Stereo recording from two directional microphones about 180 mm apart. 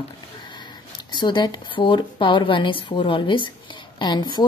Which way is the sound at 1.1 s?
25° left (ahead or behind).